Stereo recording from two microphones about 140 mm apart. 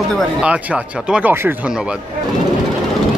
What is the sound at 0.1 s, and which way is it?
Speech, centre (ahead or behind).